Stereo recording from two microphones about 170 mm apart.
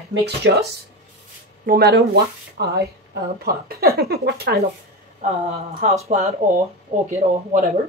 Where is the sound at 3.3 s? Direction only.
65° right (ahead or behind).